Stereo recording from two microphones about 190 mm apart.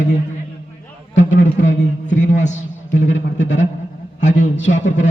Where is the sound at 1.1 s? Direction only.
70° left (ahead or behind).